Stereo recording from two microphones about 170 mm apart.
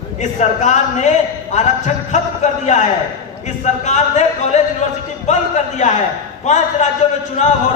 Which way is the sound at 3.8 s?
40° left (ahead or behind).